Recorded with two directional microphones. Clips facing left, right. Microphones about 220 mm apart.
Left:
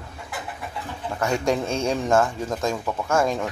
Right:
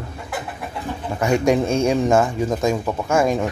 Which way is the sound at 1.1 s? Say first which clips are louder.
Right 5 dB; 15° right (ahead or behind).